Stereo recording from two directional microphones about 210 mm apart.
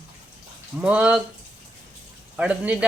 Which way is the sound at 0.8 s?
5° right (ahead or behind).